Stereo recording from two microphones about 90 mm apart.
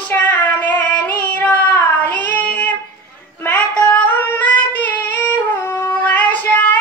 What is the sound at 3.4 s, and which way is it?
Female singing, 15° left (ahead or behind).